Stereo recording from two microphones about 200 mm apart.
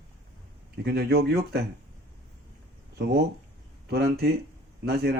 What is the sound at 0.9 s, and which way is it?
Speech, 55° right (ahead or behind).